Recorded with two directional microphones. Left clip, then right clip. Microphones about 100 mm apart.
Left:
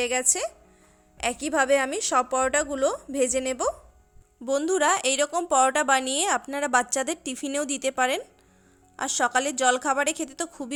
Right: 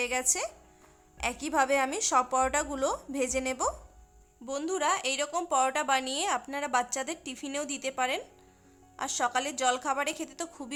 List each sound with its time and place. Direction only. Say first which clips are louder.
0.0 s a woman's voice: left 5 dB; 40° left (ahead or behind)
4.4 s a woman's voice: left 7 dB; 60° left (ahead or behind); by 10.8 s 40° left (ahead or behind)